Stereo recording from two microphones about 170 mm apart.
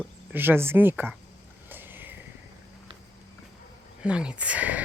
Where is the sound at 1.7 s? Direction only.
10° right (ahead or behind).